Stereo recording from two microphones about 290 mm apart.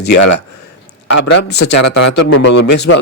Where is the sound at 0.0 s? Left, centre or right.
Left.